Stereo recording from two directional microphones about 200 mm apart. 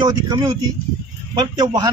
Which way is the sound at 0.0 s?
20° right (ahead or behind).